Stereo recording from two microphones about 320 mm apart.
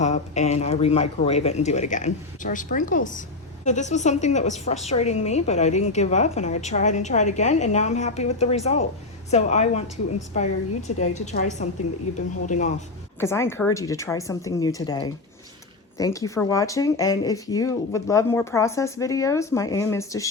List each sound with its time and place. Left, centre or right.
0.0 s a man's voice: left
13.1 s speech: centre